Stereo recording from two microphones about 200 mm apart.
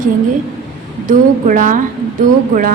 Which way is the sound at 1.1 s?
40° right (ahead or behind).